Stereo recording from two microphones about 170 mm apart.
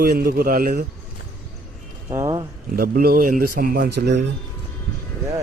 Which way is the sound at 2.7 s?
60° right (ahead or behind).